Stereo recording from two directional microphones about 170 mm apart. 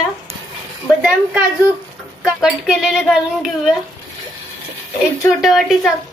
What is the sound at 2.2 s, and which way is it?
A woman's voice, centre (ahead or behind).